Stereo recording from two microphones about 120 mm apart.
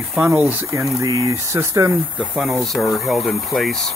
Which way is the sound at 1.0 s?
25° right (ahead or behind).